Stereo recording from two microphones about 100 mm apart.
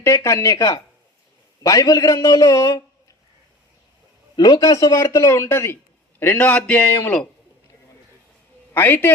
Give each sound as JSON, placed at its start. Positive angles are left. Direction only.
{"t": 0.0, "sound": "a man's voice", "side_deg": 30}
{"t": 4.4, "sound": "a man's voice", "side_deg": 40}
{"t": 6.4, "sound": "a man's voice", "side_deg": 10}
{"t": 6.7, "sound": "speech", "side_deg": 25}
{"t": 8.7, "sound": "a man's voice", "side_deg": 20}